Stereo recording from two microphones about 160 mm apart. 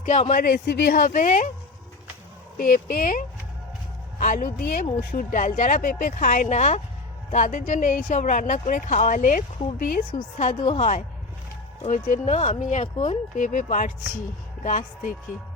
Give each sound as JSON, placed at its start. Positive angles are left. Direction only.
{"t": 0.0, "sound": "speech", "side_deg": 45}
{"t": 2.6, "sound": "speech", "side_deg": 60}